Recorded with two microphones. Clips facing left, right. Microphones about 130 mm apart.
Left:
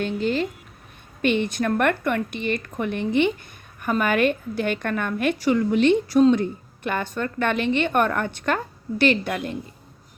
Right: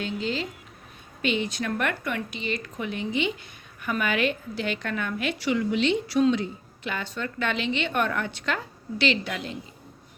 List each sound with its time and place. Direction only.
0.0 s a woman's voice: 55° left (ahead or behind)
3.8 s a woman's voice: 45° left (ahead or behind)